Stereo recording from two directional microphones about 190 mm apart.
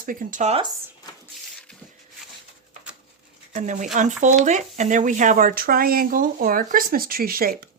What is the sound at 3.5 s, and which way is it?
Speech, 40° right (ahead or behind).